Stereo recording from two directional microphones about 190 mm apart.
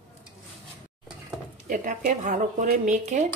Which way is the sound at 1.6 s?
45° right (ahead or behind).